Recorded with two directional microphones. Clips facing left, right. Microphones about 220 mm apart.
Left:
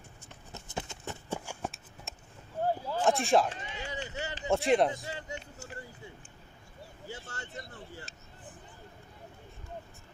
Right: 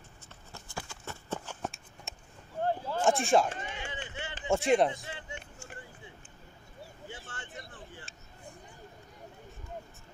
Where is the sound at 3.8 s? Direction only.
40° left (ahead or behind).